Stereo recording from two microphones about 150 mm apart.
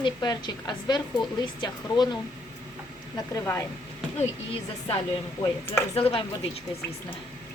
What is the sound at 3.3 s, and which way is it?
Speech, 15° left (ahead or behind).